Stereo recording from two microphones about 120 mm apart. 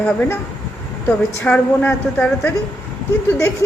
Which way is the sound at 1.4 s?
10° left (ahead or behind).